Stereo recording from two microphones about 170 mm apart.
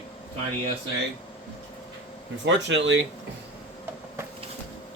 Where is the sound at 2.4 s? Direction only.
90° right.